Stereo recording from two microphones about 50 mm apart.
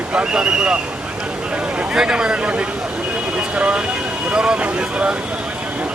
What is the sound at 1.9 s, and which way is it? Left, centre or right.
Speech, centre.